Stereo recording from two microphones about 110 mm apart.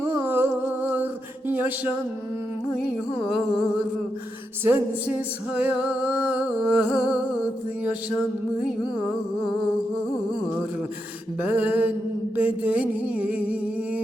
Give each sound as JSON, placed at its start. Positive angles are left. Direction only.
{"t": 0.0, "sound": "humming", "side_deg": -20}
{"t": 4.7, "sound": "humming", "side_deg": -15}
{"t": 11.3, "sound": "humming", "side_deg": -15}
{"t": 12.4, "sound": "music", "side_deg": -15}